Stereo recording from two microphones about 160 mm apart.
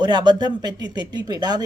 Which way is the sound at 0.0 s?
25° right (ahead or behind).